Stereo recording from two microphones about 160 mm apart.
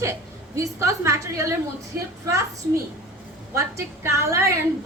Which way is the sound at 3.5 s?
15° right (ahead or behind).